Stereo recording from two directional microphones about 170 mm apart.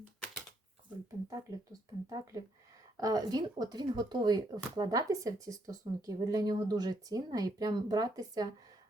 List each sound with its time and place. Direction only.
0.0 s typewriter: 5° left (ahead or behind)
1.3 s speech: 20° right (ahead or behind)